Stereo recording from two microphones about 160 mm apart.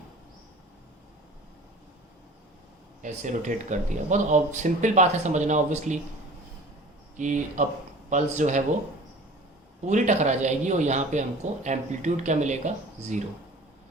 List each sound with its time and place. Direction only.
3.0 s speech: 50° right (ahead or behind)
7.2 s speech: 50° right (ahead or behind)
9.8 s speech: 45° right (ahead or behind)